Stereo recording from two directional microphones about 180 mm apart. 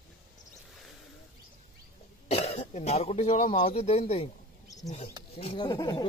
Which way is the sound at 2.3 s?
35° left (ahead or behind).